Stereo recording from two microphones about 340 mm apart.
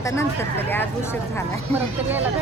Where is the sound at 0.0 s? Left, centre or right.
Centre.